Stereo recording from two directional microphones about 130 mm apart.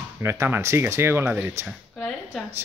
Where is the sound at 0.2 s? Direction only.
20° right (ahead or behind).